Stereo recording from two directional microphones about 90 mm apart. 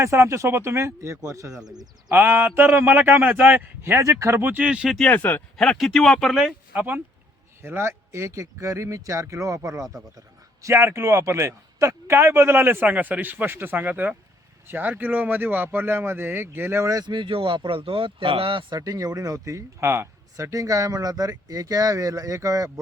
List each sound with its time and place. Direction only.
0.0 s speech: 30° right (ahead or behind)
2.1 s speech: 25° right (ahead or behind)
4.0 s speech: 35° right (ahead or behind); by 4.9 s 15° right (ahead or behind)
5.1 s speech: 20° left (ahead or behind)
5.5 s speech: 5° left (ahead or behind)
6.3 s speech: 5° right (ahead or behind)
7.6 s speech: 30° right (ahead or behind)
17.1 s speech: 65° right (ahead or behind); by 18.6 s 85° right
18.7 s speech: 40° right (ahead or behind)